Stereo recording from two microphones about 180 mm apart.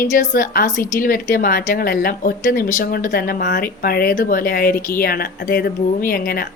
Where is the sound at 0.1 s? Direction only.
45° left (ahead or behind).